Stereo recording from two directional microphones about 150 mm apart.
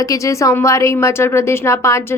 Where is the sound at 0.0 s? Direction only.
20° left (ahead or behind).